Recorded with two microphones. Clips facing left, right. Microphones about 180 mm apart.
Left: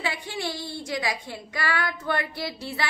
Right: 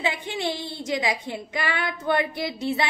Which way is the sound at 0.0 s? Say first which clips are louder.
Right 4 dB; 20° right (ahead or behind).